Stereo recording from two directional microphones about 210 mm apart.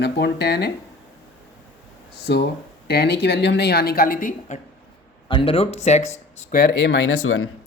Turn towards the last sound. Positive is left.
turn(degrees=80)